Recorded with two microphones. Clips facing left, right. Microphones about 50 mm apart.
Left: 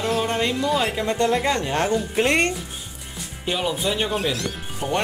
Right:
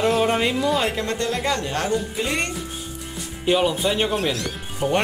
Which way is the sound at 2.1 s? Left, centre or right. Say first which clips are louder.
Left 5 dB; left.